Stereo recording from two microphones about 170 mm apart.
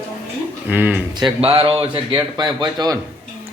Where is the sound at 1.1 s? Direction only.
25° right (ahead or behind).